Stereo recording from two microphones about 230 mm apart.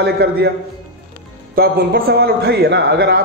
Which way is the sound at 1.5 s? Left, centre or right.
Right.